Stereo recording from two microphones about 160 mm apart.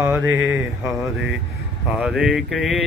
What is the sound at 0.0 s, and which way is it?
Mantra, 10° right (ahead or behind).